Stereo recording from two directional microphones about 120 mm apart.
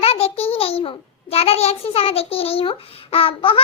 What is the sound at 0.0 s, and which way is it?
A child's voice, 55° left (ahead or behind).